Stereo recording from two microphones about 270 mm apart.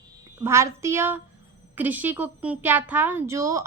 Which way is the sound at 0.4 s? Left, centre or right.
Centre.